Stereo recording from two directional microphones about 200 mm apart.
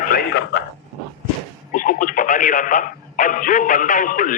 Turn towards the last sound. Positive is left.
turn(degrees=40)  # may be behind; listen again after turning